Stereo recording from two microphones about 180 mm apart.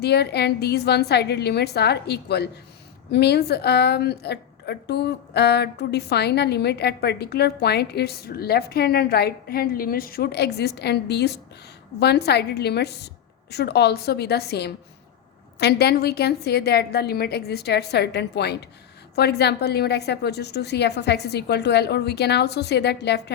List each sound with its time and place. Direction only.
0.0 s a woman's voice: 65° left (ahead or behind)